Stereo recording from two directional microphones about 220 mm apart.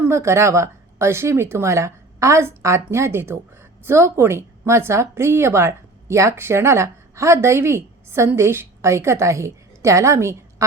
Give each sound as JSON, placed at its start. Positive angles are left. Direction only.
{"t": 0.0, "sound": "a woman's voice", "side_deg": -10}